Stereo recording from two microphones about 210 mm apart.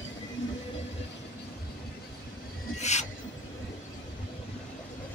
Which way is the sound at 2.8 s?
35° left (ahead or behind).